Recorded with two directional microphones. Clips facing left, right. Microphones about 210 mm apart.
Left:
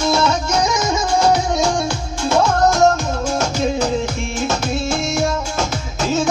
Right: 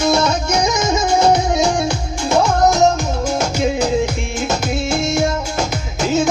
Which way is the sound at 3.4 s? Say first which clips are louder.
Right 1 dB; 10° right (ahead or behind).